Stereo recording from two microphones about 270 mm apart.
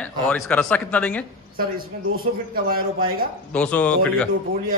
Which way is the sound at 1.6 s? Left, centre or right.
Right.